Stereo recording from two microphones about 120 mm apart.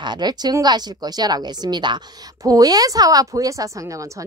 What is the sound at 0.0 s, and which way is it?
A woman's voice, 35° right (ahead or behind).